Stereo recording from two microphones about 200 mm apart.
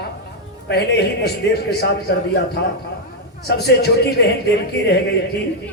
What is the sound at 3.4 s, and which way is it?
A man's voice, 55° left (ahead or behind).